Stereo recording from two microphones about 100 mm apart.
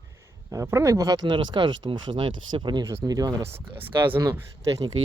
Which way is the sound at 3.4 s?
25° right (ahead or behind).